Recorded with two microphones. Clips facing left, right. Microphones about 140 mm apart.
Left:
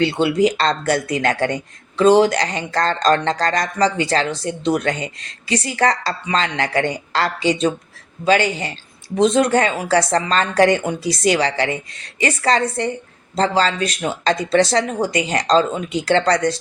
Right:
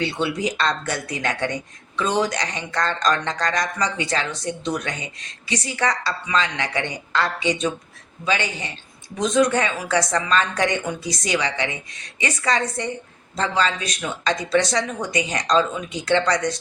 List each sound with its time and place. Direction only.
0.4 s speech: 30° left (ahead or behind)